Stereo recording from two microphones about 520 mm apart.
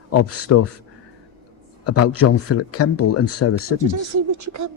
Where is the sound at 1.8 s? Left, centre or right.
Left.